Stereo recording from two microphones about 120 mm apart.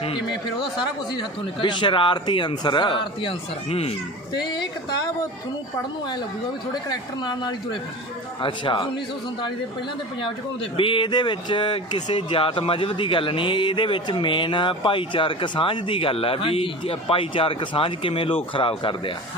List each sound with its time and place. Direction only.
0.0 s a sound: 45° left (ahead or behind)
1.6 s speech: 40° left (ahead or behind)
4.4 s speech: 35° left (ahead or behind)
6.8 s speech: 35° left (ahead or behind)
10.8 s speech: 45° left (ahead or behind)